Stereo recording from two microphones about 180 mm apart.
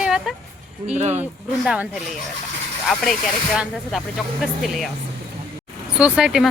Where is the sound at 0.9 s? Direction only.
40° right (ahead or behind).